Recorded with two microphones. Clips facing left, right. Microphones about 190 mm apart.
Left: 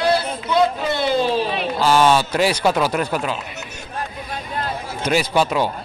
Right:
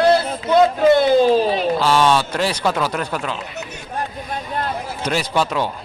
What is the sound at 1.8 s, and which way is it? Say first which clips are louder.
A man's voice: left 4 dB; 5° left (ahead or behind).